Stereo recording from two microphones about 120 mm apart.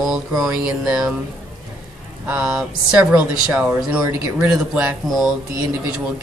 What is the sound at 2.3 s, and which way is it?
Speech, 10° right (ahead or behind).